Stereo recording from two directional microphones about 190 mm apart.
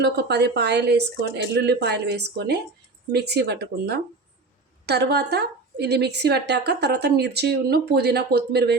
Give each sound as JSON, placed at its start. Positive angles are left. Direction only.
{"t": 0.0, "sound": "a woman's voice", "side_deg": -60}